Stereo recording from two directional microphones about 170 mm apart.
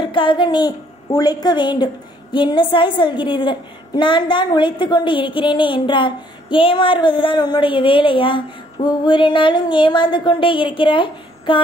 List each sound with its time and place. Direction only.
0.0 s a woman's voice: 30° left (ahead or behind)